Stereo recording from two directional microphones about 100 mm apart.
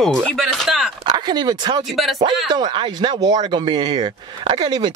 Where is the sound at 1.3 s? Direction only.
45° right (ahead or behind).